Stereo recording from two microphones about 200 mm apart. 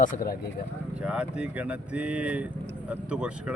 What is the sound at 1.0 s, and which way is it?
A man's voice, 5° right (ahead or behind).